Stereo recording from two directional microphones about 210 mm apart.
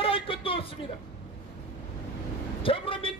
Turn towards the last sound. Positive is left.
turn(degrees=25)  # may be behind; listen again after turning